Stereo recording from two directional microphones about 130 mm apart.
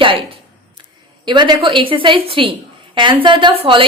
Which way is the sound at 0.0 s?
40° right (ahead or behind).